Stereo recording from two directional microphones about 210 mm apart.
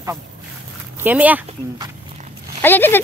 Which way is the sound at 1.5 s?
20° right (ahead or behind).